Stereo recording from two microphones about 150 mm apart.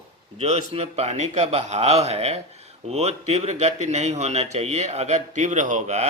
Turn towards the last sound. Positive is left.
turn(degrees=-50)  # may be behind; listen again after turning